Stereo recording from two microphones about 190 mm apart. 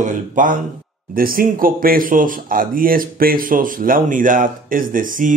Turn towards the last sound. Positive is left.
turn(degrees=-45)  # may be behind; listen again after turning